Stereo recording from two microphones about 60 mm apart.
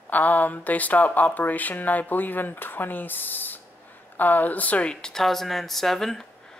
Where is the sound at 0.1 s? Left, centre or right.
Left.